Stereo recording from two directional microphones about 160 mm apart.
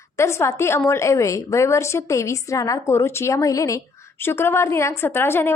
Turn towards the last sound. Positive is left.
turn(degrees=15)  # may be behind; listen again after turning